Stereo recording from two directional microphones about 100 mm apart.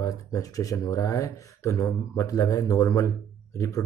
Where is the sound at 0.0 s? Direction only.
35° left (ahead or behind).